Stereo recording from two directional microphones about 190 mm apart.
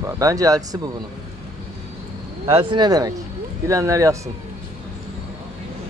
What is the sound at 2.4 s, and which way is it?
A man's voice, 25° right (ahead or behind).